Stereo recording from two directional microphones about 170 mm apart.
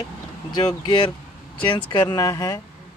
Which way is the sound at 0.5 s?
25° left (ahead or behind).